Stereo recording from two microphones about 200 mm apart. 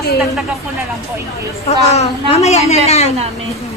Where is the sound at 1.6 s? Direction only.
30° left (ahead or behind).